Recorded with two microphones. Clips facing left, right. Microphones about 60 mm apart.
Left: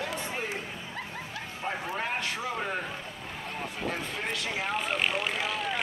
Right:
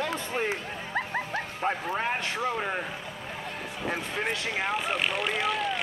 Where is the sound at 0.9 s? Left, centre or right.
Right.